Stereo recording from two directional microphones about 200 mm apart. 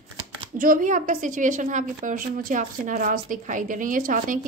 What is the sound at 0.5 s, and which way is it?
A woman's voice, 45° right (ahead or behind).